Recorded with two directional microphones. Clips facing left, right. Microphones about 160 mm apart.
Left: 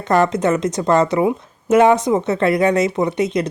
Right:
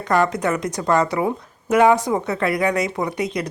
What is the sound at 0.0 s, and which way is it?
Speech, 25° left (ahead or behind).